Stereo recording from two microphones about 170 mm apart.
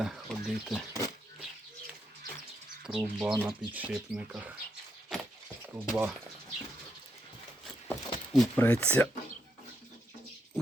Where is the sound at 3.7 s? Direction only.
10° right (ahead or behind).